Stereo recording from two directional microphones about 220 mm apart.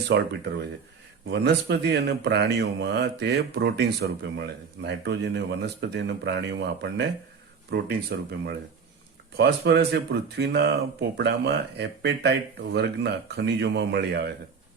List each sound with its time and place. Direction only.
0.1 s speech: 50° right (ahead or behind)
1.3 s speech: 50° right (ahead or behind)